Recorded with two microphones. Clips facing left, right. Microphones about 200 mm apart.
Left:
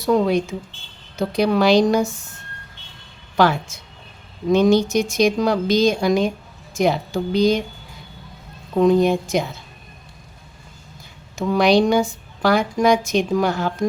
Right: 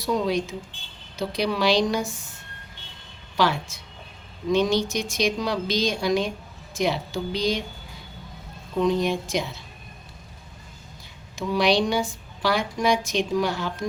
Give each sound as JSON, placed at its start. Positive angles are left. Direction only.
{"t": 0.0, "sound": "speech", "side_deg": 55}
{"t": 4.4, "sound": "speech", "side_deg": 50}
{"t": 8.7, "sound": "speech", "side_deg": 50}
{"t": 11.3, "sound": "speech", "side_deg": 45}